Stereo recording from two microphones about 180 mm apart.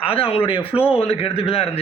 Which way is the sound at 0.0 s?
30° left (ahead or behind).